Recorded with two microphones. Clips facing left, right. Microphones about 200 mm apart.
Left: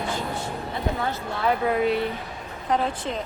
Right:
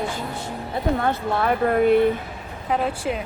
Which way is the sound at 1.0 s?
55° right (ahead or behind).